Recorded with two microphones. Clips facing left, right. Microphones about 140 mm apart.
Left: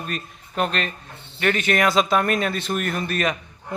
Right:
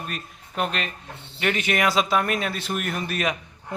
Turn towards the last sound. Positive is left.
turn(degrees=-10)  # may be behind; listen again after turning